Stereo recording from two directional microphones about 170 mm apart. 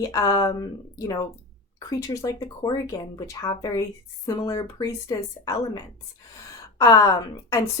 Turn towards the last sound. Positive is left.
turn(degrees=20)  # may be behind; listen again after turning